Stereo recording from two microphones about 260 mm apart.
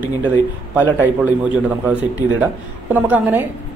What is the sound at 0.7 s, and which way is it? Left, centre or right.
A man's voice, centre.